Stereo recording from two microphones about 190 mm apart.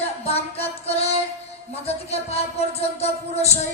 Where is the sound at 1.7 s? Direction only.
35° left (ahead or behind).